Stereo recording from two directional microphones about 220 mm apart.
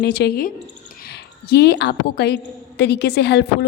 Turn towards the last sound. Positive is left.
turn(degrees=50)  # may be behind; listen again after turning